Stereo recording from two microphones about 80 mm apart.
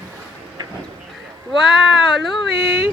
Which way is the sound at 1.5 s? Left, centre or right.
Centre.